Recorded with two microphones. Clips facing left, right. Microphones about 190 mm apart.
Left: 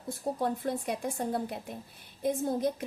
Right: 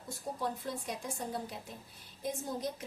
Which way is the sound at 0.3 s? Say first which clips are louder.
Left 5 dB; 55° left (ahead or behind).